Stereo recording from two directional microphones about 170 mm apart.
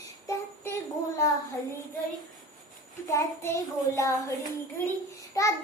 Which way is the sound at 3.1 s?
15° left (ahead or behind).